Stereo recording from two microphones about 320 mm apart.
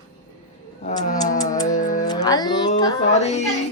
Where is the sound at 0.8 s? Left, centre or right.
Left.